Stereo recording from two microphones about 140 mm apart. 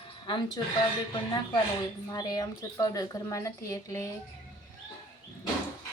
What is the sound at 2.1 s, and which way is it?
A woman's voice, 25° left (ahead or behind).